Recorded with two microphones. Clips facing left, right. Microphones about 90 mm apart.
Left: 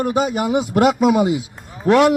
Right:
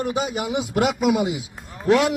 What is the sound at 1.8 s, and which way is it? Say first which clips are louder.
Speech: left 5 dB; 50° left (ahead or behind).